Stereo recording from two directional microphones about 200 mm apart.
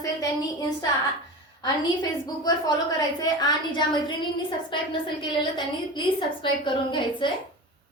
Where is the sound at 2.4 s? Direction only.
20° left (ahead or behind).